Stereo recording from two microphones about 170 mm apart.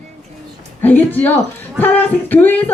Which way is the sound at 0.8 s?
10° left (ahead or behind).